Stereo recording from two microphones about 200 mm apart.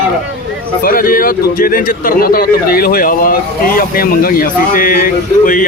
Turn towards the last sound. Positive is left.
turn(degrees=45)  # may be behind; listen again after turning